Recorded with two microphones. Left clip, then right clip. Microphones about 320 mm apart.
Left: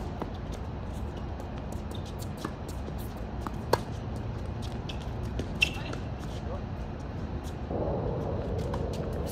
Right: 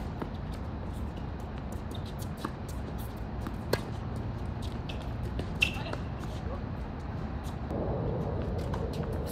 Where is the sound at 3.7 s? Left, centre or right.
Centre.